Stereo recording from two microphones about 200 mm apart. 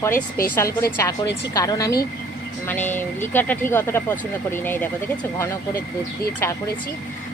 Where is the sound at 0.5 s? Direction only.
15° left (ahead or behind).